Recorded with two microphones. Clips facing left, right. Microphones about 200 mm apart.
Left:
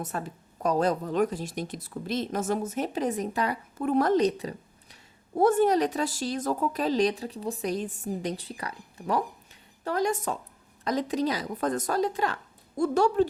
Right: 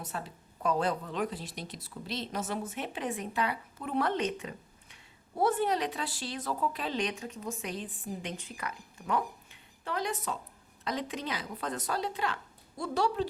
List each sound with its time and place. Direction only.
0.0 s a woman's voice: 50° left (ahead or behind)